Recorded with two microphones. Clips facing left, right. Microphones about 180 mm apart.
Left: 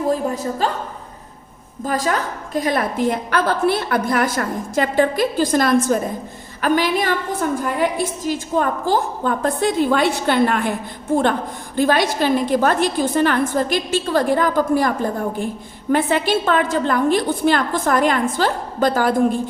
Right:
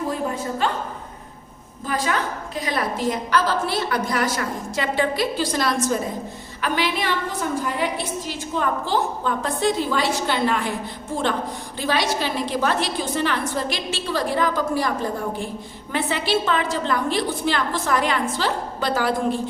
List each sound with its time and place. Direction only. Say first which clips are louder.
1.9 s a woman's voice: left 3 dB; 45° left (ahead or behind)
11.8 s a woman's voice: left 6 dB; 50° left (ahead or behind)